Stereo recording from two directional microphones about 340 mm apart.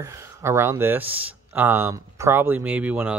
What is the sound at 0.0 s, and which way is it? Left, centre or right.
Speech, centre.